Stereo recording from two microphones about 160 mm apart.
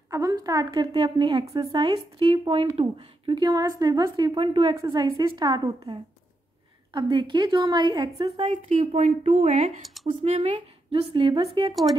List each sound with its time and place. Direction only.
0.1 s a woman's voice: 20° right (ahead or behind)
1.9 s a woman's voice: 35° right (ahead or behind)
9.8 s a sound: centre (ahead or behind)
10.0 s speech: 40° right (ahead or behind)